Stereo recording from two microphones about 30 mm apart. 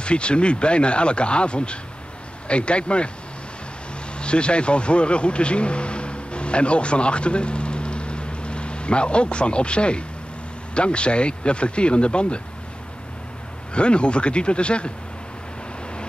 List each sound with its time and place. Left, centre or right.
0.0 s speech: left
4.2 s speech: left
13.7 s speech: left